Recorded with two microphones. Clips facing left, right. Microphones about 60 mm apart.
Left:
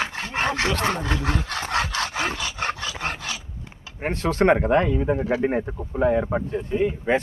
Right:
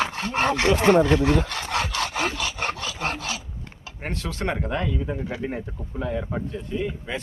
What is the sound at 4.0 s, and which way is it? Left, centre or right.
Speech, left.